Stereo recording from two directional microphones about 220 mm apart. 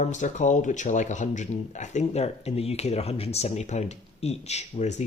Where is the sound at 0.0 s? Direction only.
35° left (ahead or behind).